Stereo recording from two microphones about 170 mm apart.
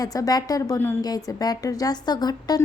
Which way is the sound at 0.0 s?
20° left (ahead or behind).